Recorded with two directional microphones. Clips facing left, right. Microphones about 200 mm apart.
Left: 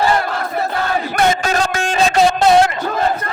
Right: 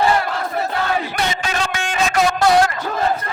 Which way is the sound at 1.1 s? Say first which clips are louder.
Left 7 dB; 50° left (ahead or behind).